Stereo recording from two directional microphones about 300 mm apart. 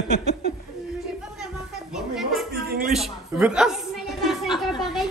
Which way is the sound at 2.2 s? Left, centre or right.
Centre.